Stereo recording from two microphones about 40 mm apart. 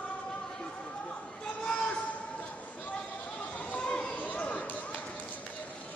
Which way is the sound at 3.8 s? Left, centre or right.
Left.